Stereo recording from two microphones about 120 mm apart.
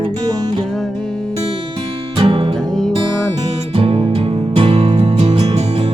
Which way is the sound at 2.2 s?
45° right (ahead or behind).